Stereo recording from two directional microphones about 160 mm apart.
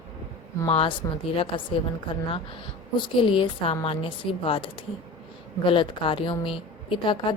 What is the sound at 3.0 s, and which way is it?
A woman's voice, 30° left (ahead or behind).